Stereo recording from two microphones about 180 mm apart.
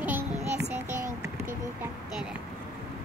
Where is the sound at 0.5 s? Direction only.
45° right (ahead or behind).